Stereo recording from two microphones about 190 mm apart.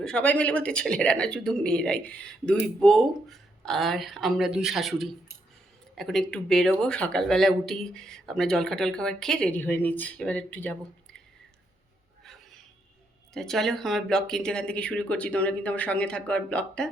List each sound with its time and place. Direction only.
0.0 s speech: 5° left (ahead or behind)
13.3 s speech: centre (ahead or behind)